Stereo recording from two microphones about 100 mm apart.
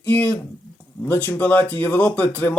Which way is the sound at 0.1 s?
15° left (ahead or behind).